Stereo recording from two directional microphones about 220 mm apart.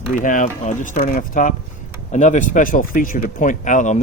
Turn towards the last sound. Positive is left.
turn(degrees=35)  # may be behind; listen again after turning